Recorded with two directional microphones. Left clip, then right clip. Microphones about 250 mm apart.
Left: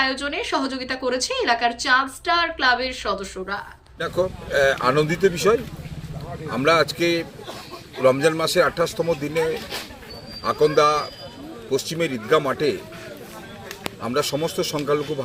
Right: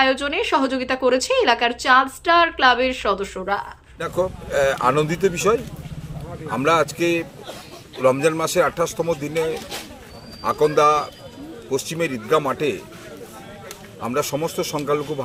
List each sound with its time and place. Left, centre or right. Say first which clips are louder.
0.0 s a woman's voice: right 4 dB; centre
4.0 s speech: even; centre
14.0 s speech: even; centre